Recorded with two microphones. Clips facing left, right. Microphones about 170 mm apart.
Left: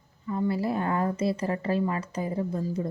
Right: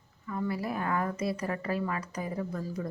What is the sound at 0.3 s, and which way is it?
A woman's voice, 25° left (ahead or behind).